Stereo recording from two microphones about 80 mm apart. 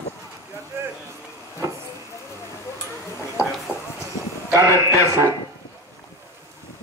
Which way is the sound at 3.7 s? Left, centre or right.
Centre.